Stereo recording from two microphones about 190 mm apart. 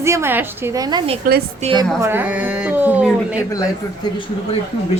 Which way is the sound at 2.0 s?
10° right (ahead or behind).